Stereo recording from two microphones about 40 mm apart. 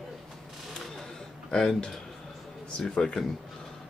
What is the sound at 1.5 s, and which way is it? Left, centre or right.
Speech, centre.